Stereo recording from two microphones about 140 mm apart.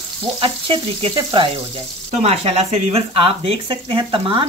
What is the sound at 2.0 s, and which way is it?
Sizzle, 50° right (ahead or behind).